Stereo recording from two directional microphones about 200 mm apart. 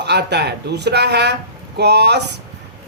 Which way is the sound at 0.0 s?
55° right (ahead or behind).